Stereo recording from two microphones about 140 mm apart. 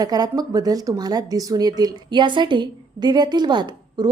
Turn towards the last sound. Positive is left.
turn(degrees=-30)  # may be behind; listen again after turning